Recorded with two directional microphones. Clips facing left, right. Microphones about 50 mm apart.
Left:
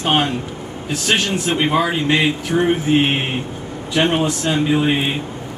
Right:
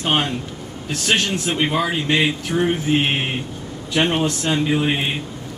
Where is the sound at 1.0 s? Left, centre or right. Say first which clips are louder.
Left 1 dB; centre.